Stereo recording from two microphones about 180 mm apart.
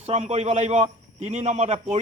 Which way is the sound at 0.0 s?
35° right (ahead or behind).